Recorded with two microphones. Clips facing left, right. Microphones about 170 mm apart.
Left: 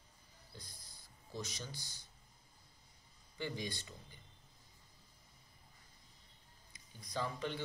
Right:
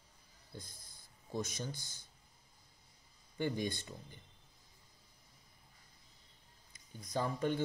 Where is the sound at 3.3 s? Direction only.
50° right (ahead or behind).